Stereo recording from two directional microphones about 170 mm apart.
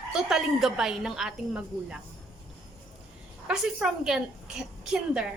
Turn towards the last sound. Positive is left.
turn(degrees=-5)  # may be behind; listen again after turning